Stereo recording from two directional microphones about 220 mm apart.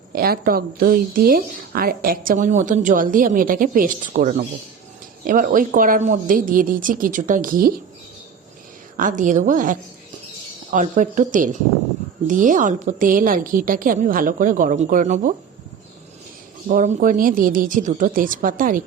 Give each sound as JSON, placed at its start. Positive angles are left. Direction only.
{"t": 0.1, "sound": "a woman's voice", "side_deg": -45}
{"t": 9.0, "sound": "a woman's voice", "side_deg": -35}
{"t": 16.6, "sound": "a woman's voice", "side_deg": -35}